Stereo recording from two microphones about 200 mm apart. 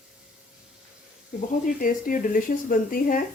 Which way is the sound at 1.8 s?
45° left (ahead or behind).